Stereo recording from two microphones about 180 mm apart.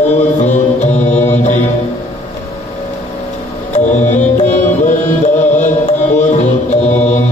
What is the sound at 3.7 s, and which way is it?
Music, 40° left (ahead or behind).